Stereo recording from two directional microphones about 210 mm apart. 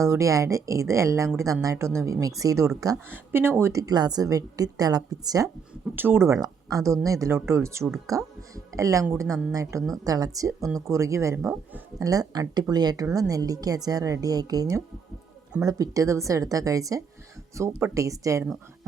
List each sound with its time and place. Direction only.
0.0 s a woman's voice: 15° right (ahead or behind)
7.9 s speech: centre (ahead or behind)
8.1 s a woman's voice: 15° right (ahead or behind)